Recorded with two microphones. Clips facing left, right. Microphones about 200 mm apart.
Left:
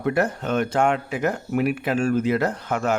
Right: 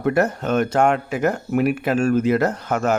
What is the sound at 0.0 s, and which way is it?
A man's voice, 45° right (ahead or behind).